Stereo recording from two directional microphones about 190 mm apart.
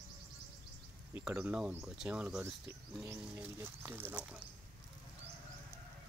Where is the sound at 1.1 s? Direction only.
5° right (ahead or behind).